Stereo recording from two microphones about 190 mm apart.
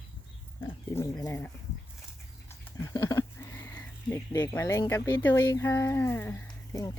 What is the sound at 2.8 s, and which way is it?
Speech, 15° left (ahead or behind).